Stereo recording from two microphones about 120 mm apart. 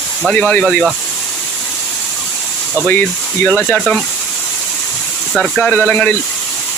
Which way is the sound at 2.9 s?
15° left (ahead or behind).